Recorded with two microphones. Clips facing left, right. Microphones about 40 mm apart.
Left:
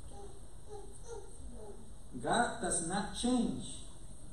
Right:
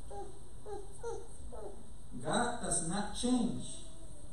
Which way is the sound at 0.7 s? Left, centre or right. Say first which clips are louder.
Right 5 dB; right.